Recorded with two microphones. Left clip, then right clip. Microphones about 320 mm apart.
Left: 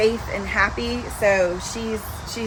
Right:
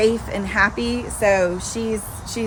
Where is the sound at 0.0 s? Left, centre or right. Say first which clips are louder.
Right 2 dB; right.